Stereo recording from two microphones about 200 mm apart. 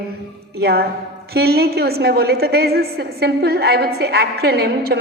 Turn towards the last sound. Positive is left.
turn(degrees=-50)  # may be behind; listen again after turning